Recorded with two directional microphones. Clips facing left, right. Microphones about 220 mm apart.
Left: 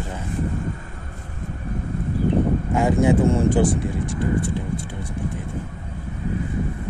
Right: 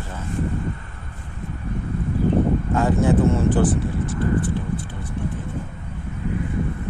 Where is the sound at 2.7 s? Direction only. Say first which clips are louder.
Left 1 dB; 10° left (ahead or behind).